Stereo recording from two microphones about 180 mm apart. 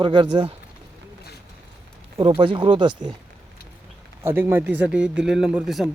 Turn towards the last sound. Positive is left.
turn(degrees=0)  # may be behind; listen again after turning